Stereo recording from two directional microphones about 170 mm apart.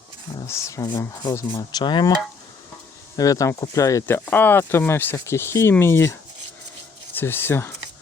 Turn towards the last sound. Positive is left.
turn(degrees=15)  # may be behind; listen again after turning